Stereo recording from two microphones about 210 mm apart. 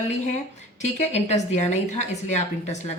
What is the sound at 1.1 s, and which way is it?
A woman's voice, 30° left (ahead or behind).